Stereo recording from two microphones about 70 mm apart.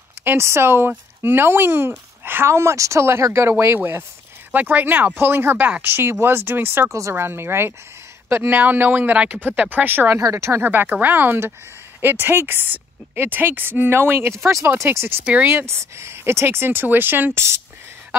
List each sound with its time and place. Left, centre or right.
0.2 s speech: right
4.5 s speech: right
6.9 s speech: right
10.2 s speech: right
10.6 s speech: right
15.0 s speech: right
15.5 s speech: right